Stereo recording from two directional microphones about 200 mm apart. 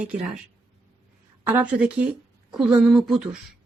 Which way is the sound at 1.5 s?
10° right (ahead or behind).